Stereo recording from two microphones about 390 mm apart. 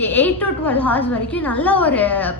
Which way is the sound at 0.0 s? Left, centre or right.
Centre.